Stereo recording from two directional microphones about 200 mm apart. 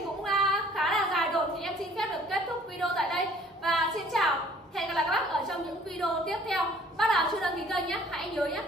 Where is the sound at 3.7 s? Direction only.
Centre (ahead or behind).